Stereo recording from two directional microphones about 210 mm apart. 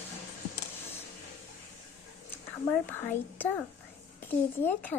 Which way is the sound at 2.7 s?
10° left (ahead or behind).